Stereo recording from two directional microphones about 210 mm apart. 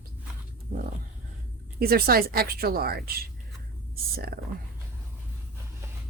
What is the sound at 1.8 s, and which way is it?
A woman's voice, 45° right (ahead or behind).